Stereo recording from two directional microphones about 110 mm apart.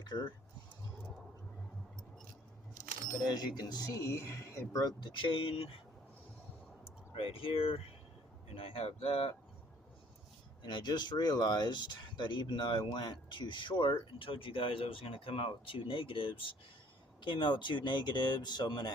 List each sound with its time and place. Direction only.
0.0 s speech: 40° left (ahead or behind)
3.2 s speech: 35° left (ahead or behind)
5.1 s speech: 50° left (ahead or behind)
6.8 s speech: 55° left (ahead or behind)
10.6 s speech: 45° left (ahead or behind)